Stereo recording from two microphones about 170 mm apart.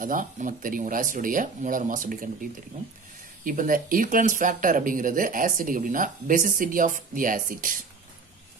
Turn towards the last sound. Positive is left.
turn(degrees=-50)  # may be behind; listen again after turning